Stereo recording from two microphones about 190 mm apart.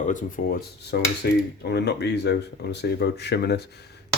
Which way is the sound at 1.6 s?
60° left (ahead or behind).